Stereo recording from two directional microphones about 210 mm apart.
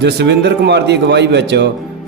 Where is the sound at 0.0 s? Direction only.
55° right (ahead or behind).